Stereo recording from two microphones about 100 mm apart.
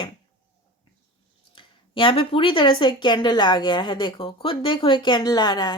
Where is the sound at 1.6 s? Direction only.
60° left (ahead or behind).